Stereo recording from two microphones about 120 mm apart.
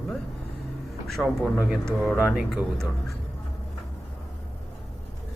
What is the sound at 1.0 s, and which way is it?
Speech, centre (ahead or behind).